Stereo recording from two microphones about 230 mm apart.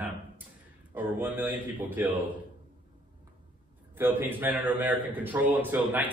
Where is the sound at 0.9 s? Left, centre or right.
Centre.